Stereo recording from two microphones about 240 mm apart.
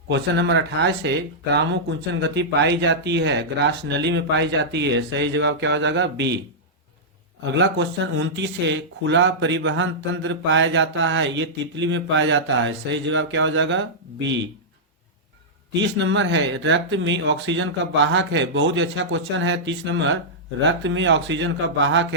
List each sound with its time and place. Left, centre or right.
0.1 s speech: right
7.5 s speech: right
15.8 s speech: right